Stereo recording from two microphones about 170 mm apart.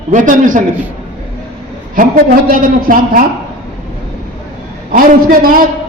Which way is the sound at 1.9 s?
50° right (ahead or behind).